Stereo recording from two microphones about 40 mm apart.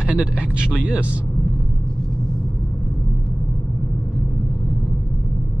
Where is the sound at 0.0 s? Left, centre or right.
Right.